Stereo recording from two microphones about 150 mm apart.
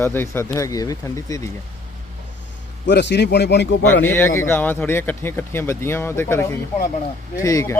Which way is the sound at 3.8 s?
15° left (ahead or behind).